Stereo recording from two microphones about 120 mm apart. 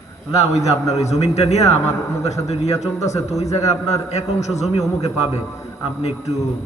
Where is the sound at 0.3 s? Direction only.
65° left (ahead or behind).